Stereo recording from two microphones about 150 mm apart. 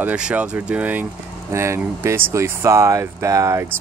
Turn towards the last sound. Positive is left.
turn(degrees=-20)  # may be behind; listen again after turning